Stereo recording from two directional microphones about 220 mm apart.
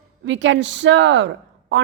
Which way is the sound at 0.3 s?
55° right (ahead or behind).